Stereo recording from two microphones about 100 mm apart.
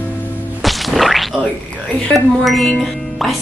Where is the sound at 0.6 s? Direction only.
Centre (ahead or behind).